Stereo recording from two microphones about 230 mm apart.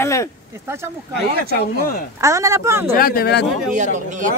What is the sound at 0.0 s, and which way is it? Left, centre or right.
Speech, centre.